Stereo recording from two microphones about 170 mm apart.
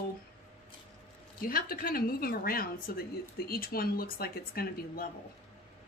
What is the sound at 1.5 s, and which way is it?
A woman's voice, 60° left (ahead or behind).